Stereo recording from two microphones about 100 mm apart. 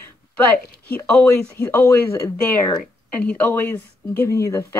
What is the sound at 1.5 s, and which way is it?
A woman's voice, 20° left (ahead or behind).